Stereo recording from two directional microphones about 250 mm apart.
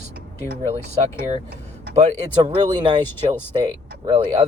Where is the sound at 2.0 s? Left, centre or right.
Right.